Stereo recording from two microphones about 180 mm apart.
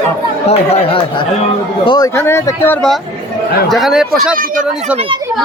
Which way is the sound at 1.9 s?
20° left (ahead or behind).